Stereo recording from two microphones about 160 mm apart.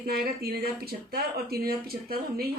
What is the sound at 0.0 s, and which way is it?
Speech, 75° right (ahead or behind).